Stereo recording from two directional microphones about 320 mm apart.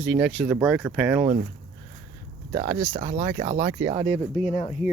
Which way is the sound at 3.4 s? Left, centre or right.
Right.